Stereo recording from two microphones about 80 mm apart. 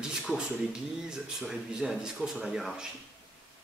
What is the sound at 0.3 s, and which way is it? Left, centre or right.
Speech, centre.